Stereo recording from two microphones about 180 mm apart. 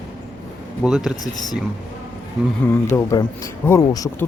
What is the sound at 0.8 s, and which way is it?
Speech, 5° right (ahead or behind).